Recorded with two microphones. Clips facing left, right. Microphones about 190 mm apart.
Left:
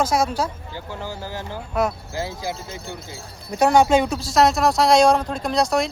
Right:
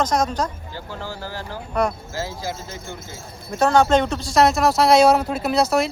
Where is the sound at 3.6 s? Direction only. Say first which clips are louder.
Left 1 dB; 15° left (ahead or behind).